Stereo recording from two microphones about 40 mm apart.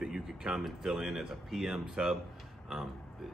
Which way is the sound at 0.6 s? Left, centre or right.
Centre.